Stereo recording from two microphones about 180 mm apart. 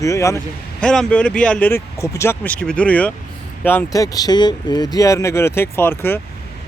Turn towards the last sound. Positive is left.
turn(degrees=10)  # may be behind; listen again after turning